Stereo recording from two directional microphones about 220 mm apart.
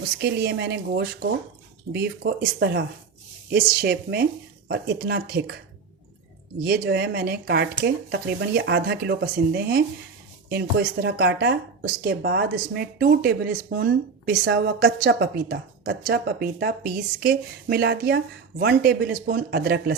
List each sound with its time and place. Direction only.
0.2 s speech: 50° right (ahead or behind)
6.7 s speech: 45° right (ahead or behind)